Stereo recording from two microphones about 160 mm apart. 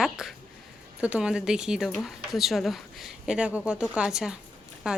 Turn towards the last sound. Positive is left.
turn(degrees=-5)  # may be behind; listen again after turning